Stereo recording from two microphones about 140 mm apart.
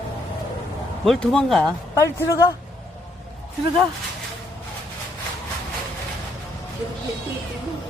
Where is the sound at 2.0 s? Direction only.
20° left (ahead or behind).